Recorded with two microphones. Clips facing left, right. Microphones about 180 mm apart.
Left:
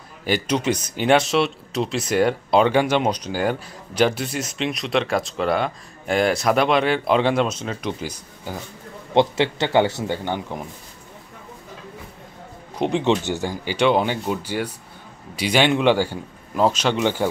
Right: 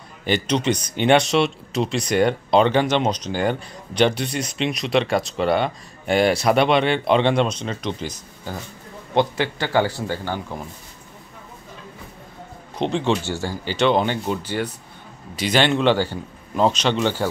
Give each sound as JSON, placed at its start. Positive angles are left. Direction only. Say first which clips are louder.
{"t": 0.2, "sound": "speech", "louder": "right 1 dB", "side_deg": 10}
{"t": 9.1, "sound": "speech", "louder": "left 2 dB", "side_deg": 25}
{"t": 12.7, "sound": "speech", "louder": "left 1 dB", "side_deg": 10}